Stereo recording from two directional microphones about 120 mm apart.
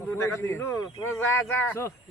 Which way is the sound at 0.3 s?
25° left (ahead or behind).